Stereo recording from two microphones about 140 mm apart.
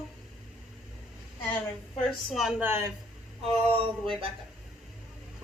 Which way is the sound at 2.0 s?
Centre (ahead or behind).